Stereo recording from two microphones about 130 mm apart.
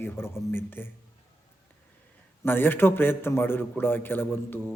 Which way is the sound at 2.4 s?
15° left (ahead or behind).